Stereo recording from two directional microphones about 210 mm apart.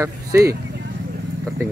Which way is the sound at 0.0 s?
15° right (ahead or behind).